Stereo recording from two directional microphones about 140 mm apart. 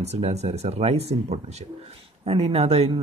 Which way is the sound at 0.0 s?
50° right (ahead or behind).